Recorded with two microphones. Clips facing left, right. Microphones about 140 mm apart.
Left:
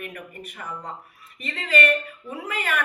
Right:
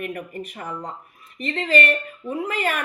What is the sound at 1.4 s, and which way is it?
A woman's voice, 45° right (ahead or behind).